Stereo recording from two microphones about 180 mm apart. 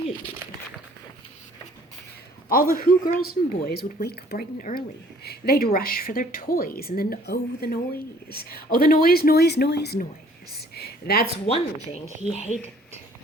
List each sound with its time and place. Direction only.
2.5 s a woman's voice: 50° left (ahead or behind)
11.4 s speech: 35° left (ahead or behind)